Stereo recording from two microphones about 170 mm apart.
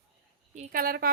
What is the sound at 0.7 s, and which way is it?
Speech, 60° right (ahead or behind).